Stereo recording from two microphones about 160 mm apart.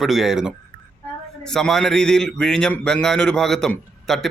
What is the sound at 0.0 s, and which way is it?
A man's voice, centre (ahead or behind).